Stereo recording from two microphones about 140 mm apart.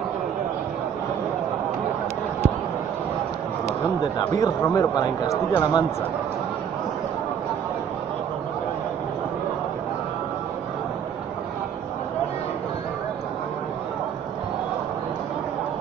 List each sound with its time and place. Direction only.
4.4 s speech: 25° left (ahead or behind)